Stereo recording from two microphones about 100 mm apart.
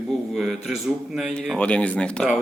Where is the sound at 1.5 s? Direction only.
10° left (ahead or behind).